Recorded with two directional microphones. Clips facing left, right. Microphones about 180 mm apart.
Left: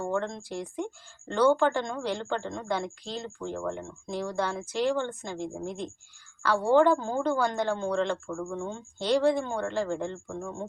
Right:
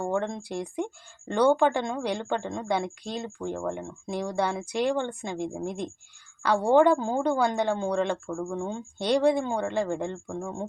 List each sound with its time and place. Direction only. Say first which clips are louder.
0.0 s a woman's voice: right 2 dB; 15° right (ahead or behind)